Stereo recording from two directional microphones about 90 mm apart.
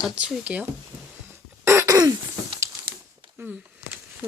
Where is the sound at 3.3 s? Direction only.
20° right (ahead or behind).